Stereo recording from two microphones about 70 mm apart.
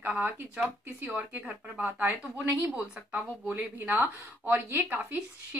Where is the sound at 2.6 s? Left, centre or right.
Centre.